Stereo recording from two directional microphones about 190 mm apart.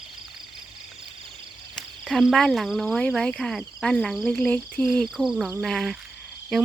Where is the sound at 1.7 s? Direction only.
5° left (ahead or behind).